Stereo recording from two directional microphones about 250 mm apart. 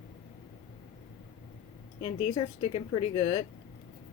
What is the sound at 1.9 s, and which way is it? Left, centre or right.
Speech, left.